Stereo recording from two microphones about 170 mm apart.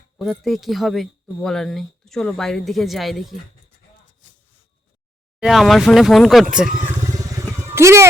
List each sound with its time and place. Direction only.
0.2 s speech: centre (ahead or behind)
5.4 s speech: centre (ahead or behind)
7.0 s vehicle: 20° right (ahead or behind)
7.7 s speech: 15° right (ahead or behind)